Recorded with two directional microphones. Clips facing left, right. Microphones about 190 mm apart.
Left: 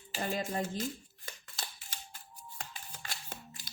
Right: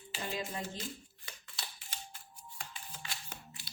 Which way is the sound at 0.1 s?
50° left (ahead or behind).